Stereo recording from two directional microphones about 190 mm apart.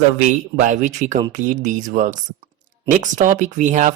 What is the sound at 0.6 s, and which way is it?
Speech, 40° right (ahead or behind).